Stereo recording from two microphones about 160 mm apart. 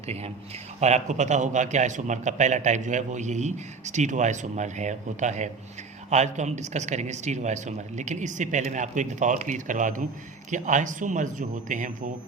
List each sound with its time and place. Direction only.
0.8 s a man's voice: 45° right (ahead or behind)